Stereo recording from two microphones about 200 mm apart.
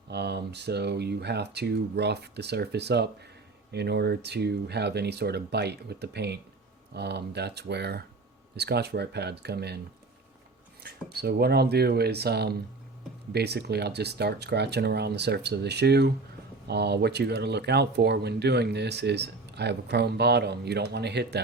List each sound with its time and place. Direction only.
0.1 s speech: 55° right (ahead or behind)
10.8 s speech: 55° right (ahead or behind)